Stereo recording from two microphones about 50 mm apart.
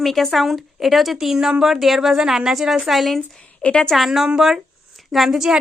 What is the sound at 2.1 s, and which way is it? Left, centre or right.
Speech, centre.